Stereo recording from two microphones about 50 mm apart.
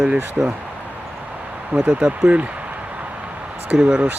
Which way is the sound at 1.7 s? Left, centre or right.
Right.